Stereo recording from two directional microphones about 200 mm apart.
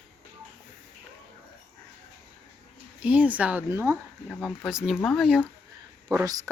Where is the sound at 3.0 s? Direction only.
5° right (ahead or behind).